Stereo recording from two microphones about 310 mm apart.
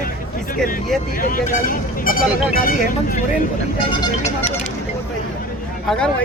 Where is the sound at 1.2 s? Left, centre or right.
Left.